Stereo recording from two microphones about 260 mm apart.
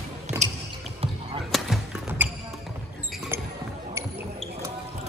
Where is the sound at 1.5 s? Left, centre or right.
Centre.